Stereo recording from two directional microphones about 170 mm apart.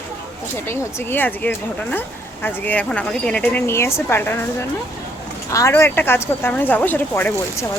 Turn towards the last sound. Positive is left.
turn(degrees=10)  # may be behind; listen again after turning